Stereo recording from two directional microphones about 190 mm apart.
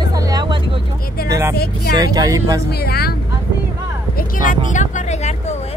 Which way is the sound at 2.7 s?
55° left (ahead or behind).